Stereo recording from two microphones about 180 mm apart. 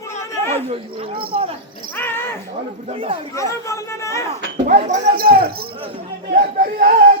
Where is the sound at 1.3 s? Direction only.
35° right (ahead or behind).